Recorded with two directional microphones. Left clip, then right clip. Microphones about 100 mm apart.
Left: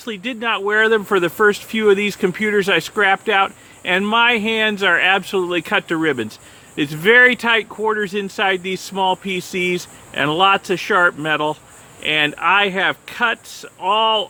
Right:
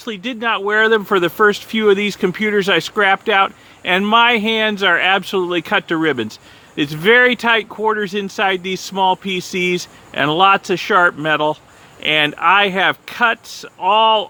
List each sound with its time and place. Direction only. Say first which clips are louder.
0.0 s speech: right 2 dB; 35° right (ahead or behind)